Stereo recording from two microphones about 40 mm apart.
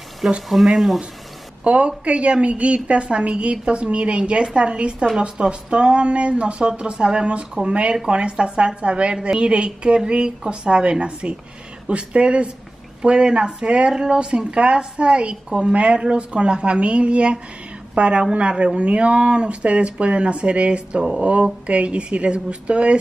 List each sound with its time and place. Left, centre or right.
0.5 s speech: centre
1.6 s a woman's voice: right